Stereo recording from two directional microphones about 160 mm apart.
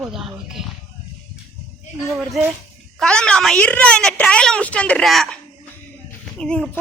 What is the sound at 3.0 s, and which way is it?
A woman's voice, 5° left (ahead or behind).